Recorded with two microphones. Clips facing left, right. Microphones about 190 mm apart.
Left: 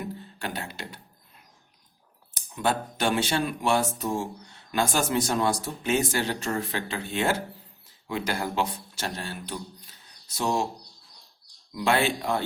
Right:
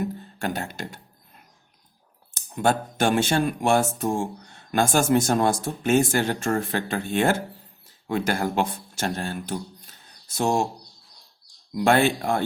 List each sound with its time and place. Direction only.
0.0 s music: 45° right (ahead or behind)
2.5 s speech: 50° right (ahead or behind)
11.7 s speech: 50° right (ahead or behind)